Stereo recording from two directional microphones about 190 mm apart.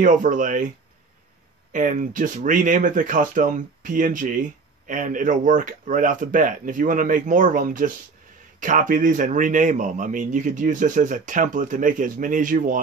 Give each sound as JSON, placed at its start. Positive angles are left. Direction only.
{"t": 0.0, "sound": "speech", "side_deg": -45}
{"t": 1.7, "sound": "speech", "side_deg": -45}